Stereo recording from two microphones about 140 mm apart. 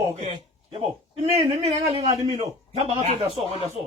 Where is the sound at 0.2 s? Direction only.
50° right (ahead or behind).